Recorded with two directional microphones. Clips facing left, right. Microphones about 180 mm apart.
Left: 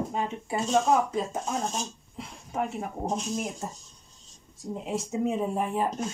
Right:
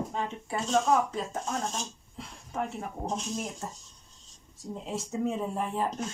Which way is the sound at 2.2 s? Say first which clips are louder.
Left 3 dB; 15° left (ahead or behind).